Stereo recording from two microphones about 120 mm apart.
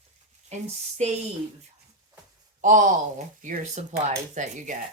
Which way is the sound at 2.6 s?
90° right.